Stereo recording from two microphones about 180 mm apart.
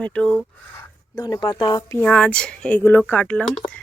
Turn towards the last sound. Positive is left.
turn(degrees=5)  # may be behind; listen again after turning